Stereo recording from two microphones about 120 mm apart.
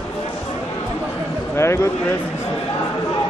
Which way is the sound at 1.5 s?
20° left (ahead or behind).